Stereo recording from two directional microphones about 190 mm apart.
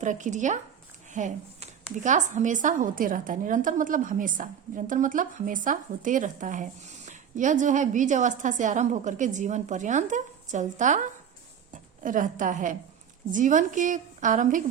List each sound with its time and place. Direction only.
0.0 s a woman's voice: 40° right (ahead or behind)